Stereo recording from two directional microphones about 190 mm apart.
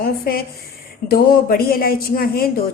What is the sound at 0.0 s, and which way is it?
Speech, 50° left (ahead or behind).